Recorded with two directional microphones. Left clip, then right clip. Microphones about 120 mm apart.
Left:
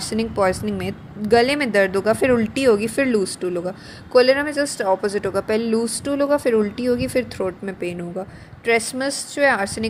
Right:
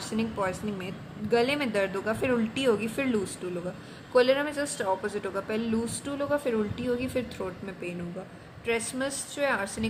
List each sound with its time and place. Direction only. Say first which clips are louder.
0.1 s a woman's voice: left 11 dB; 40° left (ahead or behind)